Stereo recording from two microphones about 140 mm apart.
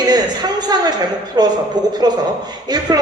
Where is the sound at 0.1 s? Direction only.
30° right (ahead or behind).